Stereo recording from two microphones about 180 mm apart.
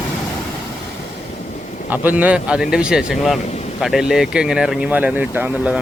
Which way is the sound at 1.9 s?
10° right (ahead or behind).